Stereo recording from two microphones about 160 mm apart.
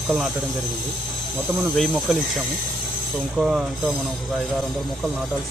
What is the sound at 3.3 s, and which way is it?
Speech, 5° right (ahead or behind).